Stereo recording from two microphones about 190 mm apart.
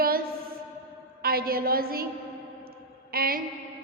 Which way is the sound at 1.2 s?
50° right (ahead or behind).